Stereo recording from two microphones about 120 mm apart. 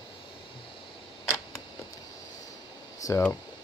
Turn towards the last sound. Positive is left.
turn(degrees=30)  # may be behind; listen again after turning